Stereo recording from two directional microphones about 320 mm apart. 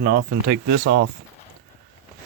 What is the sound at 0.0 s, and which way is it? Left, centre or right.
Speech, right.